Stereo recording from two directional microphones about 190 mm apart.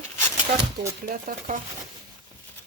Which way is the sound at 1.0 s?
40° right (ahead or behind).